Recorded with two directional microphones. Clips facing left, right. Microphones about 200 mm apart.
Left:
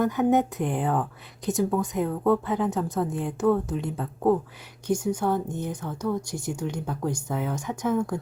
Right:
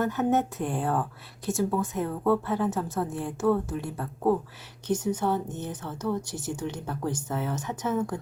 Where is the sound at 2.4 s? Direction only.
15° left (ahead or behind).